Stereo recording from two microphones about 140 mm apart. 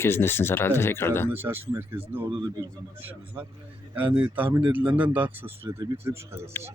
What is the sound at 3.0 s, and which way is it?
Speech, 10° right (ahead or behind).